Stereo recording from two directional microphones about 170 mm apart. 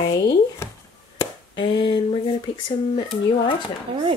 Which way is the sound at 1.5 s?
30° left (ahead or behind).